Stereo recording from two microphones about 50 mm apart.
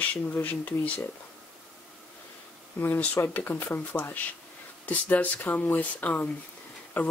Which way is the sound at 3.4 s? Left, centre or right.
Left.